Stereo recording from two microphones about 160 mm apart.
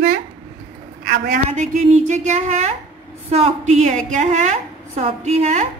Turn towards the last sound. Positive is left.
turn(degrees=-45)  # may be behind; listen again after turning